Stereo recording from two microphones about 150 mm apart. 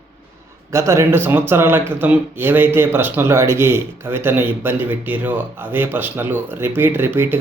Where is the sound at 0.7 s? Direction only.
20° right (ahead or behind).